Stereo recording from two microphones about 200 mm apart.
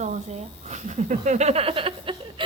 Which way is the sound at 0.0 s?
35° right (ahead or behind).